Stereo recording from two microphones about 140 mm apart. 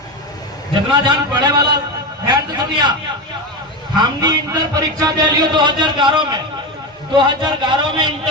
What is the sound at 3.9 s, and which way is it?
A man's voice, 30° right (ahead or behind).